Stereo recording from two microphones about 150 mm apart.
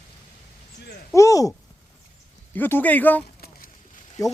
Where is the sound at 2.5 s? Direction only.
10° left (ahead or behind).